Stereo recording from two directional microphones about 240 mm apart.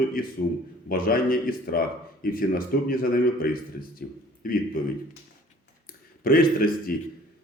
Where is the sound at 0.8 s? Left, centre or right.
Left.